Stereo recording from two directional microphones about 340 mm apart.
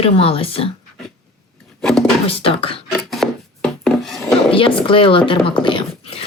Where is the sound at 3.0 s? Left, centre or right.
Centre.